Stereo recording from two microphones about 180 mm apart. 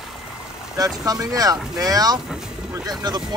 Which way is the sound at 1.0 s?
20° right (ahead or behind).